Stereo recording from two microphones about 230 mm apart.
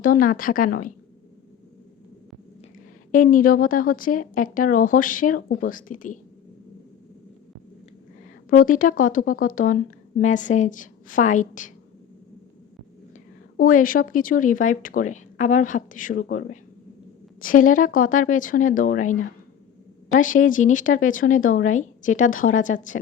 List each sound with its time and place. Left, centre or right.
0.0 s speech: left
3.1 s speech: left
8.4 s speech: left
13.6 s speech: left